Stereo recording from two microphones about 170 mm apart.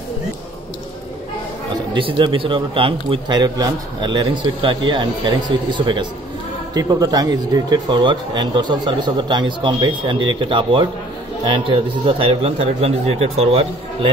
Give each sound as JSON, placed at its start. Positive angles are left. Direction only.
{"t": 2.0, "sound": "speech", "side_deg": -30}